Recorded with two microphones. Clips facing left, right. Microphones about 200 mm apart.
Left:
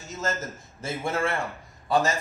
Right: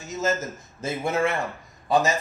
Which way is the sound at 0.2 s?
20° right (ahead or behind).